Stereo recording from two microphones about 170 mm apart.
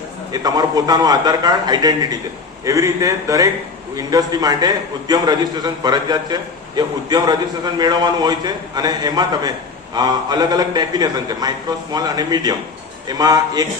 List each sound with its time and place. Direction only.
0.4 s a man's voice: 20° right (ahead or behind)